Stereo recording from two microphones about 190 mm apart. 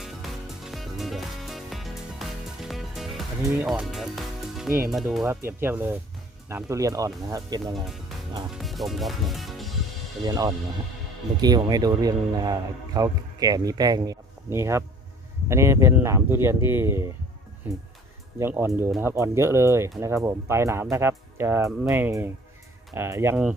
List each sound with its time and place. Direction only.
0.0 s music: centre (ahead or behind)
3.6 s speech: 5° right (ahead or behind)
7.7 s speech: centre (ahead or behind)
10.2 s speech: 20° right (ahead or behind)
18.3 s speech: 10° right (ahead or behind)